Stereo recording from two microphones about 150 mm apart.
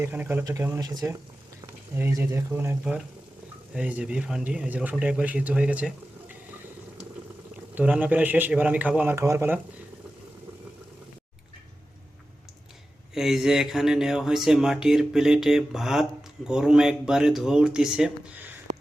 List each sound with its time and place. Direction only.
0.0 s speech: 15° right (ahead or behind)
7.8 s speech: 10° right (ahead or behind)
13.1 s a sound: centre (ahead or behind)